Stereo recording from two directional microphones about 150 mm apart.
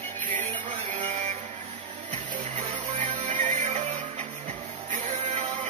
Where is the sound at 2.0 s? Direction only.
50° right (ahead or behind).